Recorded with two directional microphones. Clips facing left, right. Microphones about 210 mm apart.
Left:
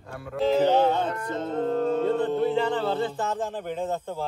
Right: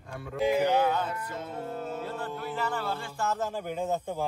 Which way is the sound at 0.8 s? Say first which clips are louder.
Left 5 dB; 25° left (ahead or behind).